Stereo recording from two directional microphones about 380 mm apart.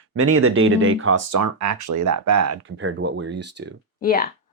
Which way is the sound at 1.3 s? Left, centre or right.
Right.